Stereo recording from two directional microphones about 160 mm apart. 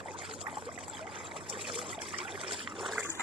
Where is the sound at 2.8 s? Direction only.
Centre (ahead or behind).